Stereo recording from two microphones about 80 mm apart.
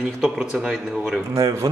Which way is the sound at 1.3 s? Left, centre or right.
Right.